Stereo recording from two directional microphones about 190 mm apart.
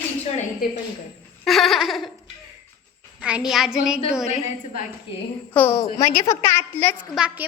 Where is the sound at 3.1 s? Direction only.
5° right (ahead or behind).